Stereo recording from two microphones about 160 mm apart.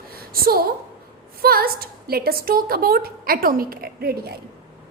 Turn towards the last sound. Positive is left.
turn(degrees=-80)